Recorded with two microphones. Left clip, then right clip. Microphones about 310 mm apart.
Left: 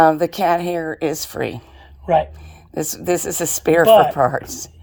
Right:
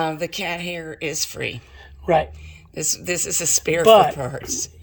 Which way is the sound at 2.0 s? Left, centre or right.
Right.